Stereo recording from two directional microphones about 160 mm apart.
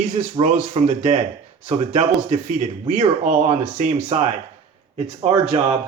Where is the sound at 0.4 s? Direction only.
50° right (ahead or behind).